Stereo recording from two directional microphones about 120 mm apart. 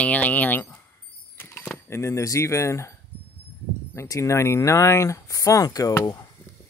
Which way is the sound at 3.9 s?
30° left (ahead or behind).